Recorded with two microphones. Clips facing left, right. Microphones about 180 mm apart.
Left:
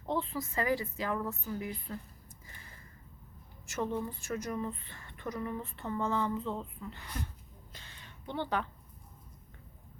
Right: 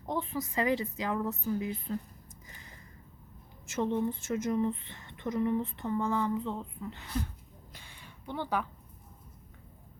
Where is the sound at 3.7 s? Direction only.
20° right (ahead or behind).